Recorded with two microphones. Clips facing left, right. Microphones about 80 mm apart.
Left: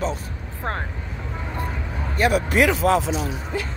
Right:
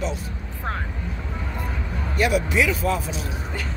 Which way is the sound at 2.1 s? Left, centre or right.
Left.